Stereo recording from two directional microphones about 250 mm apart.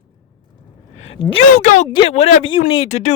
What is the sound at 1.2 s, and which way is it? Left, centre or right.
Speech, left.